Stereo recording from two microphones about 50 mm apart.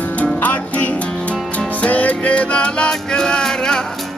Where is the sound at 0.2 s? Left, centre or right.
Left.